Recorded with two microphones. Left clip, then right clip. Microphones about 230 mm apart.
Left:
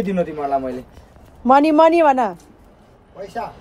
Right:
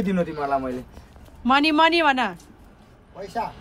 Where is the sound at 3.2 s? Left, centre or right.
Centre.